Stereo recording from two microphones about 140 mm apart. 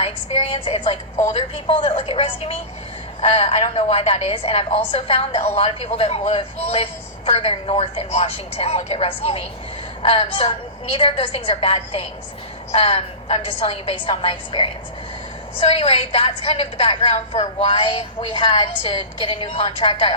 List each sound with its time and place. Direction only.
0.0 s a woman's voice: 45° left (ahead or behind)
18.9 s a woman's voice: 35° left (ahead or behind)